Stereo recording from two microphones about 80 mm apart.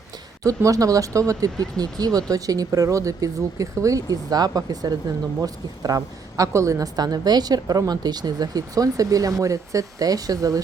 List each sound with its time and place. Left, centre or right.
0.4 s speech: right